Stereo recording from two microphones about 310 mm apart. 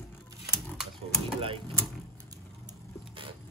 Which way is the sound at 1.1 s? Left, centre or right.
Centre.